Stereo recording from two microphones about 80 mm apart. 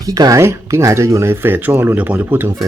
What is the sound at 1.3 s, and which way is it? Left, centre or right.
Speech, right.